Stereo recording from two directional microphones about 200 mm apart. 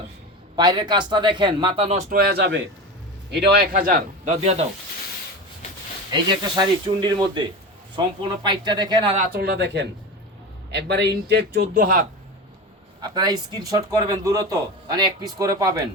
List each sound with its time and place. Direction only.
0.5 s speech: 20° right (ahead or behind)
2.0 s a man's voice: 45° right (ahead or behind)
4.4 s speech: 30° right (ahead or behind)
6.1 s speech: 20° right (ahead or behind)
9.4 s a man's voice: 55° right (ahead or behind)
13.0 s speech: 20° right (ahead or behind)